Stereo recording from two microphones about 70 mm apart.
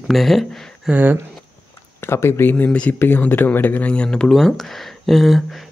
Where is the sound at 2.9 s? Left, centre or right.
Left; by 5.4 s centre.